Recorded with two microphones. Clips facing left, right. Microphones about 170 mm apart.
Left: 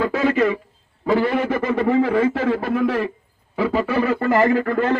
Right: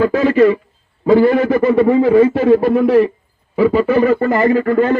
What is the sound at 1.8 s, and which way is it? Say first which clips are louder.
Speech: right 6 dB; 30° right (ahead or behind).